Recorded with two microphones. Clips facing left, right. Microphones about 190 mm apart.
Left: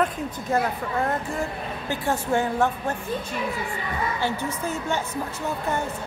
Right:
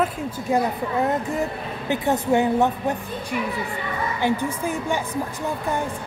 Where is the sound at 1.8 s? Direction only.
20° right (ahead or behind).